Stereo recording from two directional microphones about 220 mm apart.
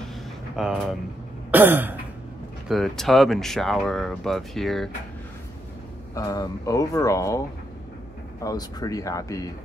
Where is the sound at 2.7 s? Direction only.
Centre (ahead or behind).